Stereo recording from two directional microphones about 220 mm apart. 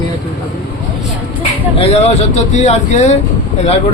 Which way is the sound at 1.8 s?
25° left (ahead or behind).